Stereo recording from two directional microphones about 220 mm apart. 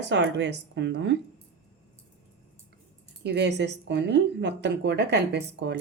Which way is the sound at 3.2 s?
50° right (ahead or behind).